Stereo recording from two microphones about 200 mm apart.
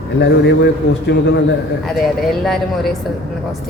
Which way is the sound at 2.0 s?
Centre (ahead or behind).